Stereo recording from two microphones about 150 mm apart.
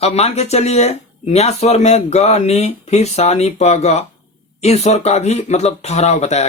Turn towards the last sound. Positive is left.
turn(degrees=45)  # may be behind; listen again after turning